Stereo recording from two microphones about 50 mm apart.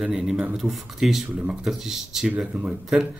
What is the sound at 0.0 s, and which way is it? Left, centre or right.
Speech, centre.